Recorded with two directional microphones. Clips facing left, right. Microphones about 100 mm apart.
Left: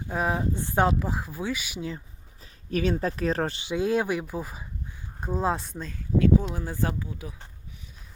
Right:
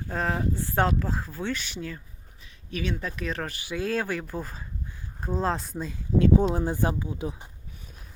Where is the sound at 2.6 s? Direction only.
40° left (ahead or behind); by 5.7 s 5° left (ahead or behind).